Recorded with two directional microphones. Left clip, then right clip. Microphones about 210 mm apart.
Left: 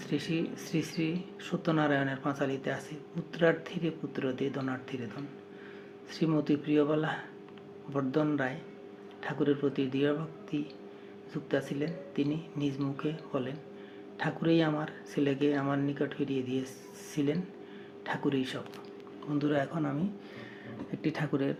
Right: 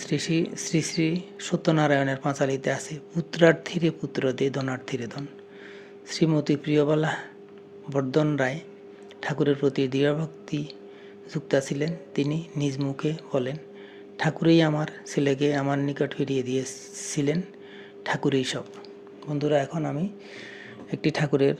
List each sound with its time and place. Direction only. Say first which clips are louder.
0.0 s speech: right 7 dB; 45° right (ahead or behind)
19.4 s speech: right 7 dB; 35° right (ahead or behind)